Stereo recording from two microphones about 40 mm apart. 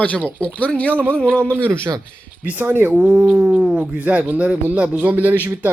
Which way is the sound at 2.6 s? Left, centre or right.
Right.